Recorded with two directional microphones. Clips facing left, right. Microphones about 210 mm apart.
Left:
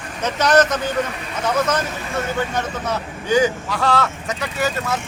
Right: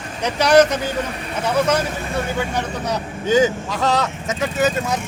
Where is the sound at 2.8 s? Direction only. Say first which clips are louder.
Right 2 dB; 20° right (ahead or behind).